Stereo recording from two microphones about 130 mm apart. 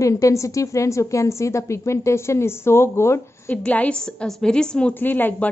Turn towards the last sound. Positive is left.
turn(degrees=15)  # may be behind; listen again after turning